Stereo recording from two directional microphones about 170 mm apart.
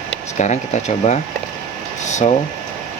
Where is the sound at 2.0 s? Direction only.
45° left (ahead or behind).